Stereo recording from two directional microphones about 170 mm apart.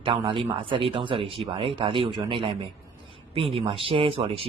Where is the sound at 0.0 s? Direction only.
35° right (ahead or behind).